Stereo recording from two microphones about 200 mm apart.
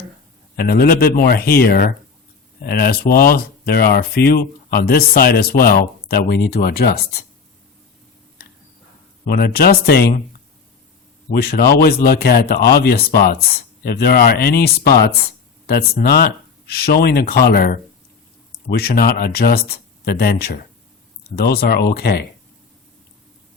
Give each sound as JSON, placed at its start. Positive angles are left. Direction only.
{"t": 0.5, "sound": "speech", "side_deg": 50}
{"t": 9.2, "sound": "speech", "side_deg": 50}
{"t": 11.3, "sound": "speech", "side_deg": 50}